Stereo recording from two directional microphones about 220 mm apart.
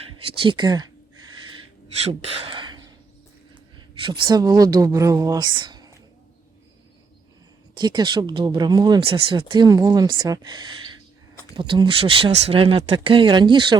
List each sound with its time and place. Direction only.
0.0 s speech: 25° right (ahead or behind)
2.0 s a sound: 25° right (ahead or behind)
4.0 s speech: 20° right (ahead or behind)
7.8 s speech: 20° right (ahead or behind)